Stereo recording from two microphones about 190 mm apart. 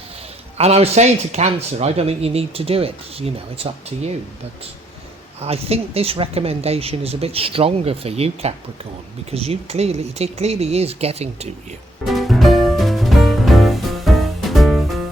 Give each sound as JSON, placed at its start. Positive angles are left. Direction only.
{"t": 0.5, "sound": "speech", "side_deg": -35}
{"t": 5.4, "sound": "speech", "side_deg": -30}
{"t": 12.0, "sound": "music", "side_deg": 0}